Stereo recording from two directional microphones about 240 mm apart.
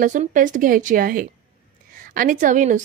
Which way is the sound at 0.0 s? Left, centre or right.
Right.